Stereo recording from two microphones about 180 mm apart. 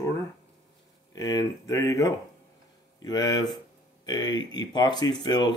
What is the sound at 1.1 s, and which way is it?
Speech, 20° left (ahead or behind).